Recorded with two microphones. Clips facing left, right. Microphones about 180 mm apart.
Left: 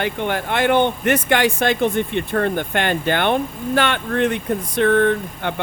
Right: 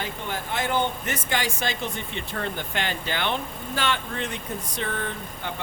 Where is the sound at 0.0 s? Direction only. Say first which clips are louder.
Left 10 dB; 70° left (ahead or behind).